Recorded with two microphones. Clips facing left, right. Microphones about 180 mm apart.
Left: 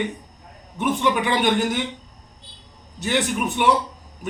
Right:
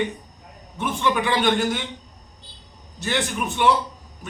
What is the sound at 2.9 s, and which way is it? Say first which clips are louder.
Speech: left 3 dB; 15° left (ahead or behind).